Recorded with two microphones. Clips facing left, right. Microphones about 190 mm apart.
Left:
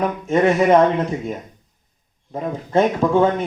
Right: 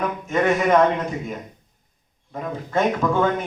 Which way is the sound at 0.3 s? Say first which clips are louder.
Left 4 dB; 30° left (ahead or behind).